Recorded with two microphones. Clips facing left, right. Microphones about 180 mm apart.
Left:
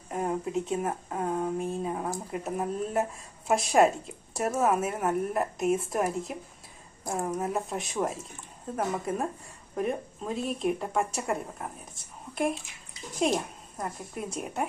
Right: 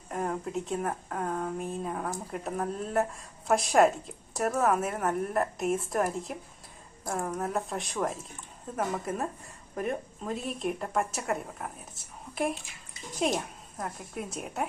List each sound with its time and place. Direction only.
0.1 s speech: 5° left (ahead or behind)
1.1 s speech: 15° left (ahead or behind)
1.5 s a woman's voice: centre (ahead or behind)
7.0 s a woman's voice: 20° left (ahead or behind)
7.4 s a woman's voice: centre (ahead or behind)